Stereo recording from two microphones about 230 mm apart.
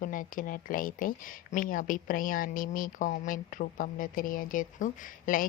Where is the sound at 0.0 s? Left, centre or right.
Left.